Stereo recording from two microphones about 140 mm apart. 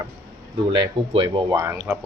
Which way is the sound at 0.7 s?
35° right (ahead or behind).